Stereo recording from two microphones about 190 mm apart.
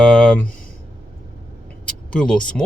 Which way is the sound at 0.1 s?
5° left (ahead or behind).